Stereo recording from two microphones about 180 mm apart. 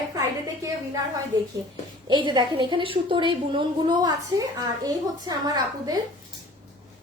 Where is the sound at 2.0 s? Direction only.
25° right (ahead or behind).